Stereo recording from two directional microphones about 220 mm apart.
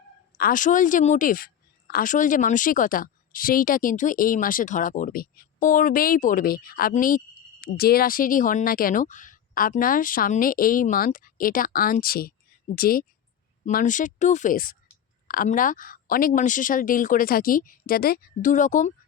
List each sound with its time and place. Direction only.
0.3 s a woman's voice: 40° left (ahead or behind)